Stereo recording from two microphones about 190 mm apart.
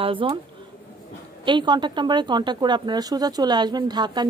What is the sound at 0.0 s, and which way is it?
Speech, 25° right (ahead or behind).